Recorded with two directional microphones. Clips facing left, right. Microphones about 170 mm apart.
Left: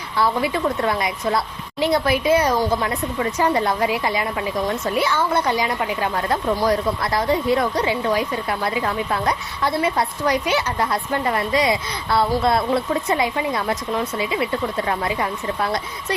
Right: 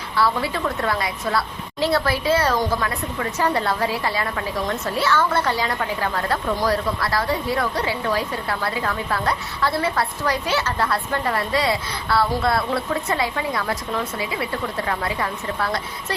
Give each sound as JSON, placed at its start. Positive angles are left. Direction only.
{"t": 0.2, "sound": "a woman's voice", "side_deg": 20}